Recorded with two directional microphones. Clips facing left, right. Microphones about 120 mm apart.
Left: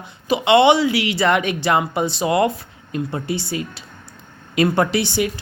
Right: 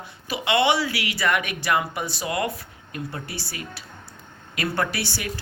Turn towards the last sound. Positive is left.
turn(degrees=20)  # may be behind; listen again after turning